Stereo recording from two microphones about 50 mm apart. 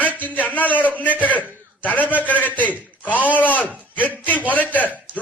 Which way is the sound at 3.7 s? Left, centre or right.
Right.